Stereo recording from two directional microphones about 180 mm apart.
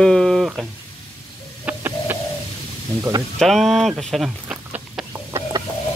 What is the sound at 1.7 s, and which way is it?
Printer, 15° right (ahead or behind).